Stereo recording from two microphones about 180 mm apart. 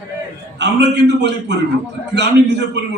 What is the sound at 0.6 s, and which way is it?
A man's voice, 75° right (ahead or behind).